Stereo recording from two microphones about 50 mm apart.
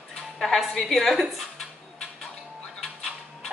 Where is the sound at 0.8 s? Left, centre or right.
Centre.